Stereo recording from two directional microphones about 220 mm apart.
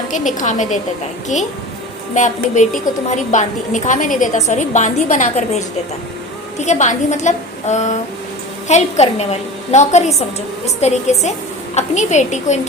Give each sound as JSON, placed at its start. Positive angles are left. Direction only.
{"t": 0.1, "sound": "a woman's voice", "side_deg": 35}
{"t": 2.1, "sound": "a woman's voice", "side_deg": 35}